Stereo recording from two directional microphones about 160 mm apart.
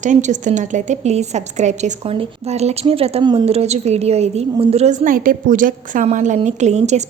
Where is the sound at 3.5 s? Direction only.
40° right (ahead or behind).